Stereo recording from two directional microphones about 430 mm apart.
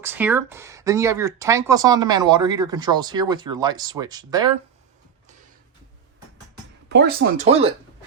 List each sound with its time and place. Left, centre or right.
0.0 s speech: centre
6.8 s speech: right